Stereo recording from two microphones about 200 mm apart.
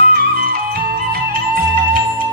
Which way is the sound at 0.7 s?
50° right (ahead or behind).